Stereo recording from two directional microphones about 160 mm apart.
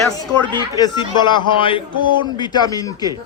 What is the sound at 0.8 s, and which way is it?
Speech, 30° left (ahead or behind).